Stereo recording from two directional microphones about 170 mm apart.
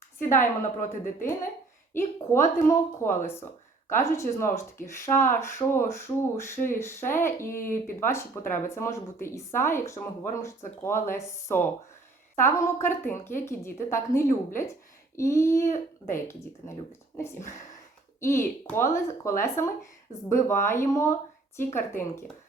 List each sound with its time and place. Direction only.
0.3 s a woman's voice: 50° left (ahead or behind)
1.9 s a woman's voice: 15° left (ahead or behind)
18.2 s a woman's voice: 15° left (ahead or behind)